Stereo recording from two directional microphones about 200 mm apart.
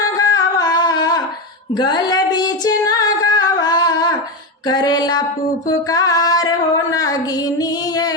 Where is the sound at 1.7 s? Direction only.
20° left (ahead or behind).